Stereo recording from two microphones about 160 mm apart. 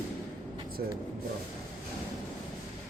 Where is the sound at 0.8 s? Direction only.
70° right (ahead or behind).